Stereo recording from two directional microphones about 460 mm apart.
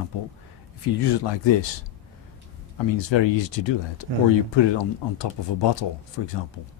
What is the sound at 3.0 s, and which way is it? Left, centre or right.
Speech, left.